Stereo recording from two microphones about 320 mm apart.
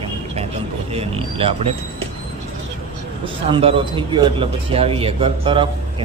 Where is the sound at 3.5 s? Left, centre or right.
Centre.